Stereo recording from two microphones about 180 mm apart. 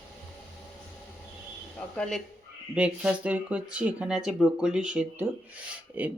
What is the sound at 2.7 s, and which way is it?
Speech, 5° right (ahead or behind).